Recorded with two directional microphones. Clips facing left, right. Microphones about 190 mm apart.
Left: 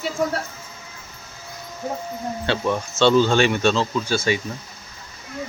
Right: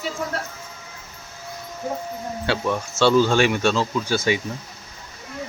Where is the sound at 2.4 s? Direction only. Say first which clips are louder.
Left 1 dB; 5° right (ahead or behind).